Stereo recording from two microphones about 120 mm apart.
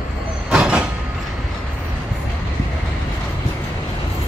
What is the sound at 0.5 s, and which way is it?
Train, 10° right (ahead or behind).